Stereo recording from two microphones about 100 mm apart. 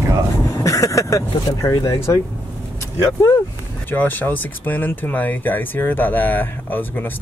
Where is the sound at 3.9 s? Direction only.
20° left (ahead or behind).